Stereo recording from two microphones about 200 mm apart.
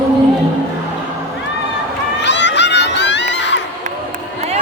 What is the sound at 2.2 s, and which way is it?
Crowd, 60° left (ahead or behind).